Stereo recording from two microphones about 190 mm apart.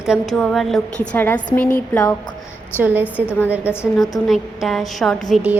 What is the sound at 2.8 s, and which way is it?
Speech, 10° right (ahead or behind).